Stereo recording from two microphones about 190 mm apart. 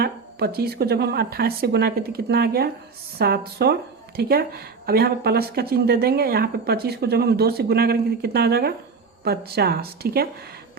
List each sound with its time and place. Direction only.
0.0 s speech: 55° right (ahead or behind)